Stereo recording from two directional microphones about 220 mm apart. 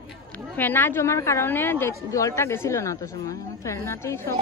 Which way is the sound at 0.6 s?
10° left (ahead or behind).